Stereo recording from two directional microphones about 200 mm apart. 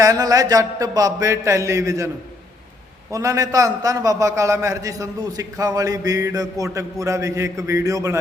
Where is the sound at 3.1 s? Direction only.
15° right (ahead or behind).